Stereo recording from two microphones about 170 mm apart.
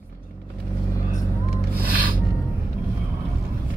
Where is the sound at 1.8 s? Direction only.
60° right (ahead or behind).